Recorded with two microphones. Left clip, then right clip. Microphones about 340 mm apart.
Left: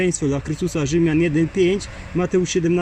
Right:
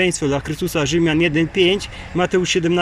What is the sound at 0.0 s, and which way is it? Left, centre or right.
Speech, right.